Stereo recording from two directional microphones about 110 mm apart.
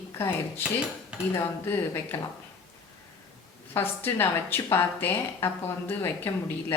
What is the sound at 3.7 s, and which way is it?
A woman's voice, 20° left (ahead or behind).